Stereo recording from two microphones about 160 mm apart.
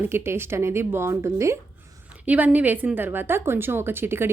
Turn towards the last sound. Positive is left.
turn(degrees=-15)  # may be behind; listen again after turning